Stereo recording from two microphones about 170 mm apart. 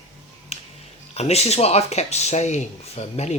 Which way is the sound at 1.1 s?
40° left (ahead or behind).